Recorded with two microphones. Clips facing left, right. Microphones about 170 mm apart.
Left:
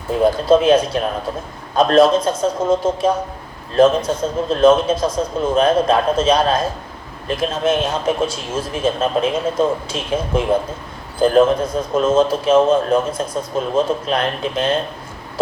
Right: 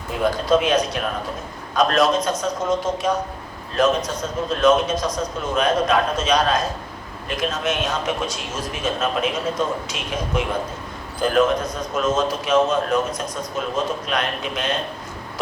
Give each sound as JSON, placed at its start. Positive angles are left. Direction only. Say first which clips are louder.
{"t": 0.4, "sound": "a man's voice", "louder": "left 5 dB", "side_deg": 30}